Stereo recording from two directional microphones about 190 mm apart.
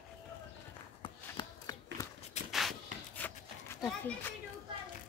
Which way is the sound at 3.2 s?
10° left (ahead or behind).